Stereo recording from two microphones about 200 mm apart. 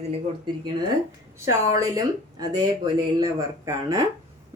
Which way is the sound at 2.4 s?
20° right (ahead or behind).